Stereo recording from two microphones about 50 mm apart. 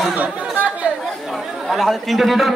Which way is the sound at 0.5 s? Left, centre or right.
Right.